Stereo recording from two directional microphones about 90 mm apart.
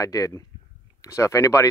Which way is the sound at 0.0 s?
40° left (ahead or behind).